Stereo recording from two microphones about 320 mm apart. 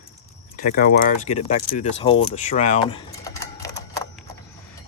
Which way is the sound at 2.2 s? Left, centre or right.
Left.